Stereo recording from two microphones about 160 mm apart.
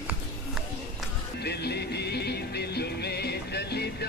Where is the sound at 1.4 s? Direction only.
90° left.